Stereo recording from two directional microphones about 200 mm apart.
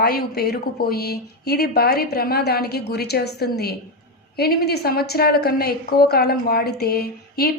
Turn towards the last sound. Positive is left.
turn(degrees=50)  # may be behind; listen again after turning